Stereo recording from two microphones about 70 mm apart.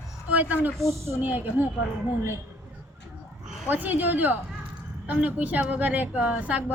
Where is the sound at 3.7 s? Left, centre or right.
Right.